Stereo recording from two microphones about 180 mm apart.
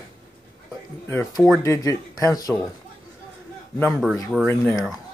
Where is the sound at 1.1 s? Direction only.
15° left (ahead or behind).